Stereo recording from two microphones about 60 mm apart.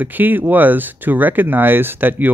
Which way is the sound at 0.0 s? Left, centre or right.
Right.